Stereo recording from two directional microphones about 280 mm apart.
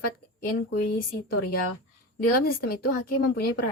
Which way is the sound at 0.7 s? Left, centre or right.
Left.